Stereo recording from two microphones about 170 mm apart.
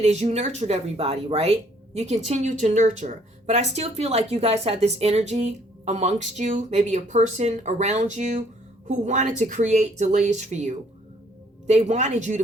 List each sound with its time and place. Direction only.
0.0 s speech: 40° right (ahead or behind)